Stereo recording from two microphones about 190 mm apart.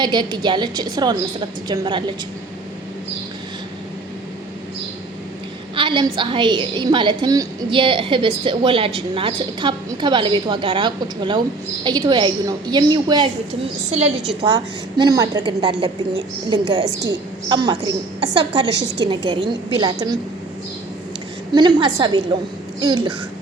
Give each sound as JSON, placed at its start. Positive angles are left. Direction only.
{"t": 0.0, "sound": "a woman's voice", "side_deg": -25}
{"t": 5.7, "sound": "a woman's voice", "side_deg": -25}
{"t": 21.5, "sound": "a woman's voice", "side_deg": -25}